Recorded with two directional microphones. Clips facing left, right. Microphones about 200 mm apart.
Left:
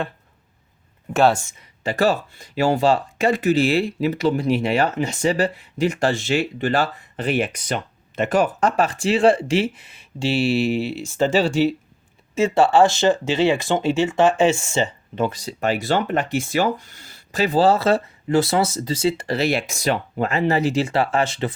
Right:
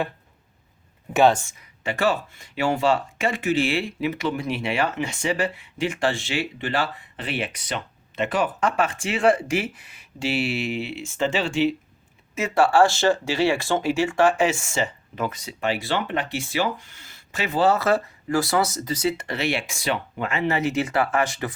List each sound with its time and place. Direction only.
1.1 s speech: centre (ahead or behind)
1.8 s speech: 35° left (ahead or behind)
12.3 s speech: 25° left (ahead or behind)